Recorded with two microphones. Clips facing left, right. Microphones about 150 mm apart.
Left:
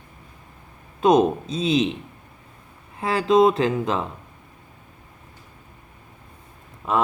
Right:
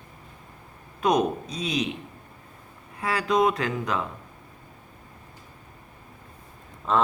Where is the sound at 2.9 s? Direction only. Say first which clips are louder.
Left 6 dB; 25° left (ahead or behind).